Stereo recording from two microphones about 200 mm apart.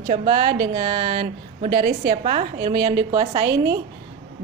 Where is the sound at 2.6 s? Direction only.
20° right (ahead or behind).